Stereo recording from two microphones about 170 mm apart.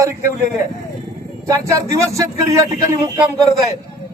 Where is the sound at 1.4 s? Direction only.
20° right (ahead or behind).